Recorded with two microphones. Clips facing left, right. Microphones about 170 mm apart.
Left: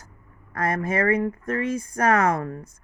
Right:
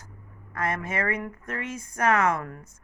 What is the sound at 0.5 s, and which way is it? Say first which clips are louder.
A woman's voice: left 5 dB; 35° left (ahead or behind).